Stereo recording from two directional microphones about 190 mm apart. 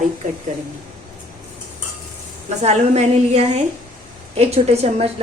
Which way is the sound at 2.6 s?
35° right (ahead or behind).